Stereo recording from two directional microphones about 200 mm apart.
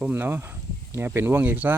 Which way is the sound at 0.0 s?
10° right (ahead or behind).